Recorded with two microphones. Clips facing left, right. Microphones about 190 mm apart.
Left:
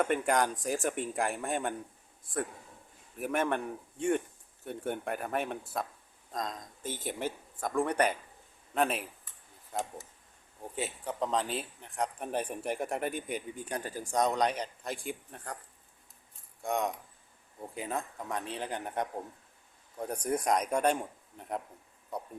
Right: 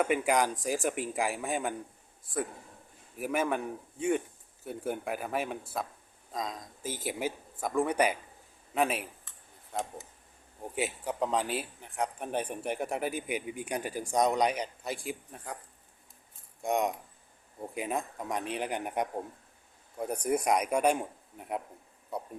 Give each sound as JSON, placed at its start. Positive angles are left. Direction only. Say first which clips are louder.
{"t": 0.0, "sound": "a man's voice", "louder": "right 1 dB", "side_deg": -5}
{"t": 10.6, "sound": "a man's voice", "louder": "right 3 dB", "side_deg": -10}
{"t": 16.6, "sound": "a man's voice", "louder": "right 3 dB", "side_deg": -15}